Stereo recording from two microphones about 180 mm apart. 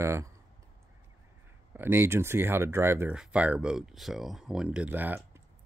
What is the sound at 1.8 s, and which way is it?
Speech, 10° right (ahead or behind).